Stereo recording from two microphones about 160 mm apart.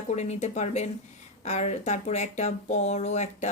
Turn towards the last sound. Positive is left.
turn(degrees=45)  # may be behind; listen again after turning